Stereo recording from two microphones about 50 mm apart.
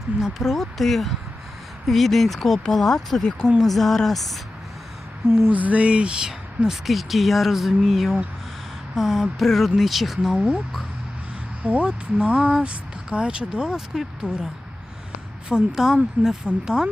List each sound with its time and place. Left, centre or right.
0.4 s speech: centre
5.5 s speech: right; by 6.7 s centre
6.8 s speech: centre
10.3 s speech: centre
11.6 s speech: right; by 14.4 s centre
15.4 s speech: centre